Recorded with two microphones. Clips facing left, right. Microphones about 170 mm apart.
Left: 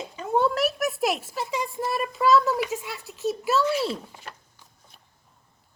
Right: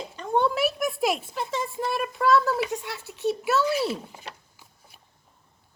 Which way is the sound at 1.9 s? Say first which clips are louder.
Left 1 dB; centre (ahead or behind).